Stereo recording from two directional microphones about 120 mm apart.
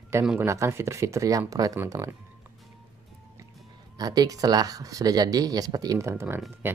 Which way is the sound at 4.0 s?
35° right (ahead or behind).